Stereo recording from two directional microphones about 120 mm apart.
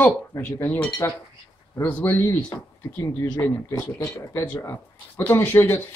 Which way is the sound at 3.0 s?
15° left (ahead or behind).